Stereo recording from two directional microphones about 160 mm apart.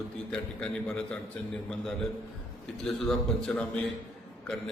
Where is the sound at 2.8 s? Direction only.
Centre (ahead or behind).